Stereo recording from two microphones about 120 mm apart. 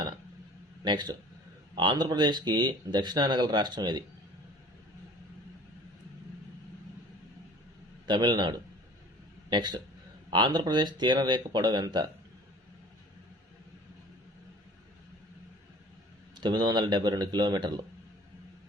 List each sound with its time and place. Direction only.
0.9 s speech: 40° right (ahead or behind)
8.0 s speech: 40° right (ahead or behind)
16.3 s speech: 40° right (ahead or behind)